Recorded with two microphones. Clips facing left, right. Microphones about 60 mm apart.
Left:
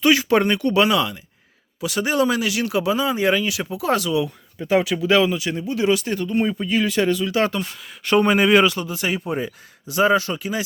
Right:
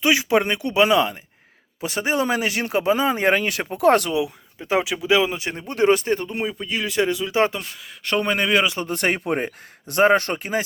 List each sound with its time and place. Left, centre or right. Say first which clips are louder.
0.0 s speech: left 2 dB; centre
0.9 s speech: right 2 dB; right
4.8 s speech: left 1 dB; centre
5.3 s speech: left 4 dB; right
6.4 s speech: left 5 dB; centre
6.8 s speech: right 1 dB; centre
8.0 s speech: left 5 dB; centre
8.8 s speech: right 2 dB; right